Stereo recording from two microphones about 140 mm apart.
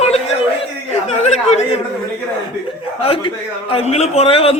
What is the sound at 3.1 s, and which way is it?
A man's voice, 40° left (ahead or behind).